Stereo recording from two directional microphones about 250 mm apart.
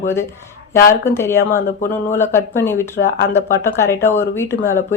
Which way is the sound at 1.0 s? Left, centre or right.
Centre.